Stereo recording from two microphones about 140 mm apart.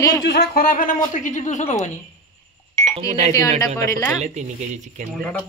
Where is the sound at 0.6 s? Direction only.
90° left; by 1.9 s 55° left (ahead or behind).